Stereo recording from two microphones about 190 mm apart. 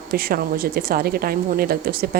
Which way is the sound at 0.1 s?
50° right (ahead or behind).